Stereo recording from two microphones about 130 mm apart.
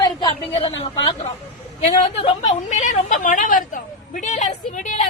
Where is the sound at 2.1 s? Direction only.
45° left (ahead or behind).